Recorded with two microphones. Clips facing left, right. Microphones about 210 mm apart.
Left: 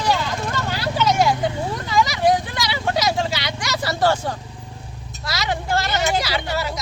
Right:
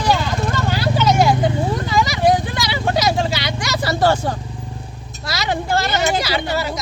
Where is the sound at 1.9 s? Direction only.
35° right (ahead or behind).